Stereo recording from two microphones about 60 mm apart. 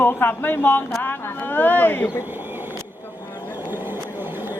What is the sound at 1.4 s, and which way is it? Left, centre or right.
Speech, left.